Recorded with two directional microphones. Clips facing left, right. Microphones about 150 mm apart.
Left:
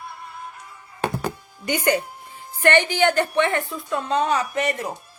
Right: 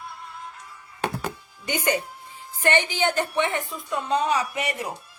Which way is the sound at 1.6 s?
20° right (ahead or behind).